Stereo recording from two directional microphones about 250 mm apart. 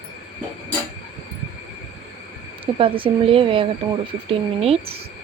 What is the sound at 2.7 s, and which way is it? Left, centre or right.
Speech, right.